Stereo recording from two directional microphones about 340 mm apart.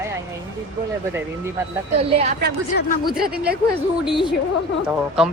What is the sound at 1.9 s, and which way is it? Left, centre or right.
Speech, centre.